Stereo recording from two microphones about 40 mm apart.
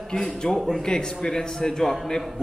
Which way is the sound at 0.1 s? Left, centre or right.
Centre.